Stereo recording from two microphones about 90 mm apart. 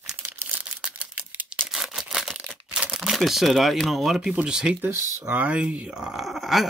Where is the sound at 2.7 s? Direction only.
10° right (ahead or behind).